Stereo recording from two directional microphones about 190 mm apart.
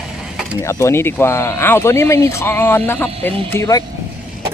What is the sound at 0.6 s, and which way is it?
Speech, 15° left (ahead or behind).